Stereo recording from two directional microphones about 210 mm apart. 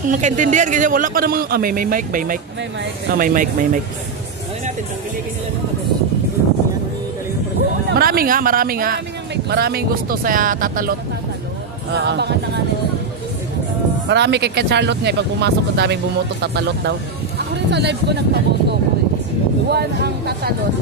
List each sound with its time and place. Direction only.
0.1 s a man's voice: 35° right (ahead or behind)
7.9 s speech: 45° right (ahead or behind)
11.9 s speech: 55° right (ahead or behind)
14.0 s speech: 55° right (ahead or behind)